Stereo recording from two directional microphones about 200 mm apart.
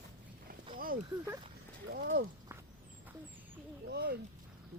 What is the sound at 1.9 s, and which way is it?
Speech, 50° right (ahead or behind).